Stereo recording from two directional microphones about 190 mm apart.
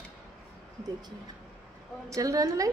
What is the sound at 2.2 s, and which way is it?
Speech, 15° right (ahead or behind).